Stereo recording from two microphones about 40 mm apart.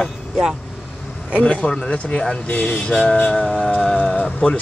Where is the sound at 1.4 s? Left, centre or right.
Left.